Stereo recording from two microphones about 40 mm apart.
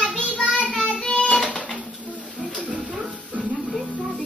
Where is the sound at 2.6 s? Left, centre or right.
Right.